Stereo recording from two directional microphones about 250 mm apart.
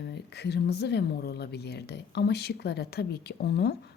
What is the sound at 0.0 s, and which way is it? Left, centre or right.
Speech, left.